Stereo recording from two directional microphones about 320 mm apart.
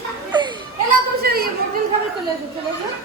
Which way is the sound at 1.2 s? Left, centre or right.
Right.